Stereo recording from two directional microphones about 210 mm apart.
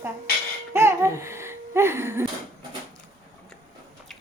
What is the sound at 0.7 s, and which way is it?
Laughter, 15° right (ahead or behind).